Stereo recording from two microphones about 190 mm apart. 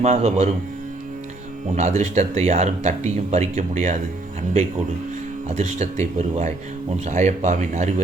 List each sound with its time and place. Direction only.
0.0 s speech: 35° right (ahead or behind)
1.7 s speech: 35° right (ahead or behind)
5.5 s speech: 35° right (ahead or behind)